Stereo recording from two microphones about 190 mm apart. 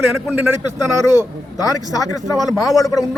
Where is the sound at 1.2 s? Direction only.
20° left (ahead or behind).